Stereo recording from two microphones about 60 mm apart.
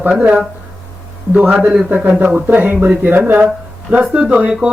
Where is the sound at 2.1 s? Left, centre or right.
Right.